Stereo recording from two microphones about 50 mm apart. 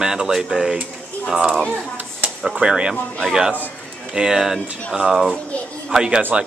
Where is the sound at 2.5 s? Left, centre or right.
Centre.